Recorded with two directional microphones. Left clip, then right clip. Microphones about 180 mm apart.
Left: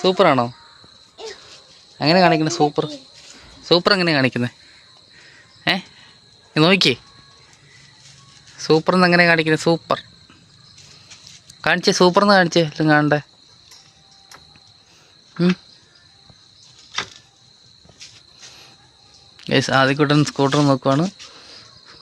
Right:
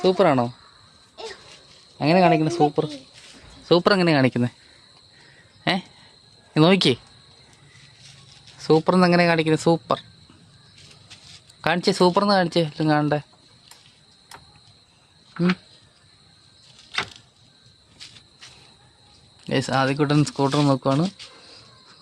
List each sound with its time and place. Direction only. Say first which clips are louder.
0.0 s speech: left 3 dB; 10° right (ahead or behind)
2.0 s speech: left 3 dB; 10° right (ahead or behind)
5.6 s a sound: left 4 dB; 15° right (ahead or behind)
6.5 s speech: left 3 dB; 15° right (ahead or behind)
8.5 s speech: left 2 dB; 10° right (ahead or behind)
11.6 s speech: left 4 dB; 10° right (ahead or behind); by 13.2 s 5° left (ahead or behind)
19.4 s speech: left 6 dB; 5° left (ahead or behind)